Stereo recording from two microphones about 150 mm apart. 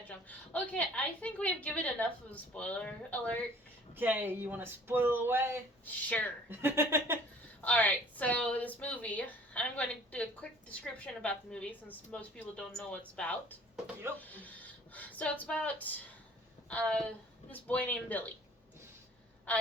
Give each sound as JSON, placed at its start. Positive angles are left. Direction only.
{"t": 0.1, "sound": "a woman's voice", "side_deg": 10}
{"t": 3.9, "sound": "speech", "side_deg": -15}
{"t": 5.8, "sound": "a woman's voice", "side_deg": 10}
{"t": 6.5, "sound": "speech", "side_deg": -15}
{"t": 7.6, "sound": "a woman's voice", "side_deg": 10}
{"t": 19.5, "sound": "a woman's voice", "side_deg": 10}